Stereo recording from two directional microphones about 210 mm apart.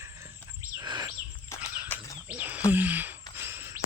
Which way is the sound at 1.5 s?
15° left (ahead or behind).